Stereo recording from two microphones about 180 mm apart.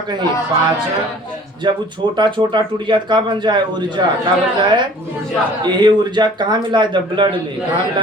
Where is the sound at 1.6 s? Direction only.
25° right (ahead or behind).